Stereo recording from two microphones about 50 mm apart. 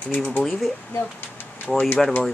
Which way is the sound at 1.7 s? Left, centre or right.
Centre.